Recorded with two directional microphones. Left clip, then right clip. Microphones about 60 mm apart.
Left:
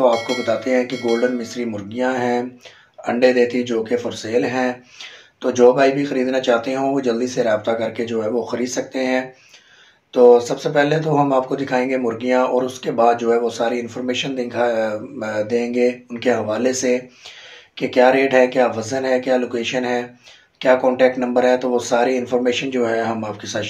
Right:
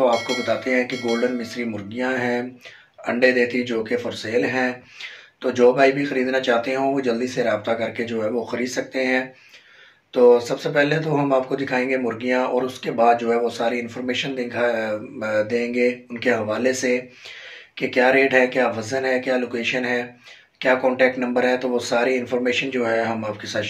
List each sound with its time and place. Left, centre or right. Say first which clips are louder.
0.1 s speech: left 2 dB; centre
0.6 s speech: left 3 dB; left
0.9 s speech: left 3 dB; centre
1.4 s speech: left 2 dB; left